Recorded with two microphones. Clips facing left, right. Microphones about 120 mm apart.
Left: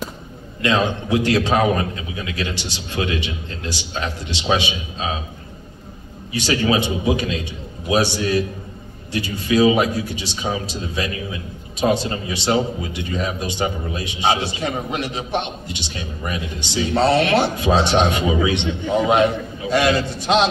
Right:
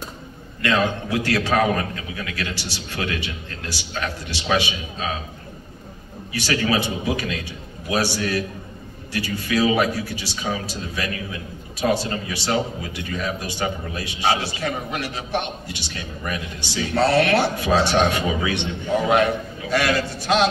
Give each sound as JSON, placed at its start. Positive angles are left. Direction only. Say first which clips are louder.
{"t": 0.6, "sound": "a man's voice", "louder": "left 2 dB", "side_deg": 20}
{"t": 6.3, "sound": "a man's voice", "louder": "left 3 dB", "side_deg": 20}